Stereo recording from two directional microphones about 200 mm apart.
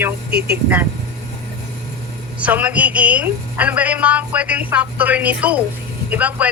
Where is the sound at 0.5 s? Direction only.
10° right (ahead or behind).